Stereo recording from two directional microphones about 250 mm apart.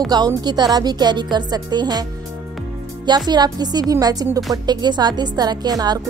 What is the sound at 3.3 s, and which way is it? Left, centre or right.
Speech, centre.